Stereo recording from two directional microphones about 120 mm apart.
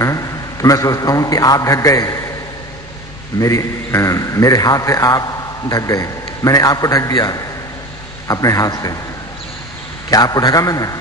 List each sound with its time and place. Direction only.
0.0 s a man's voice: 25° left (ahead or behind)
3.3 s a man's voice: 25° left (ahead or behind)
10.0 s a man's voice: 30° left (ahead or behind)